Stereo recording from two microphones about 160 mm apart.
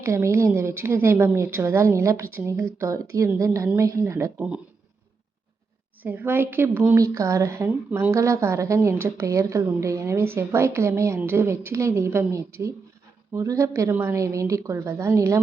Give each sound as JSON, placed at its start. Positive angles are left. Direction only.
{"t": 0.0, "sound": "a woman's voice", "side_deg": -15}
{"t": 6.0, "sound": "a woman's voice", "side_deg": -10}